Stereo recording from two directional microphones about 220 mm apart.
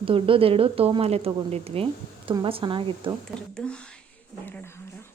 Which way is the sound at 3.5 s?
5° left (ahead or behind).